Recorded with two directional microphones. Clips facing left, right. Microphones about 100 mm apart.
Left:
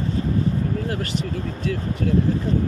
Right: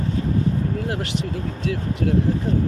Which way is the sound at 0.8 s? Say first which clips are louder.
Even; 75° right (ahead or behind).